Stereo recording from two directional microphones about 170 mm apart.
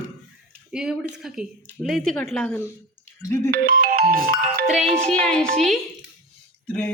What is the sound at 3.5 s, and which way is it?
Speech, 55° right (ahead or behind).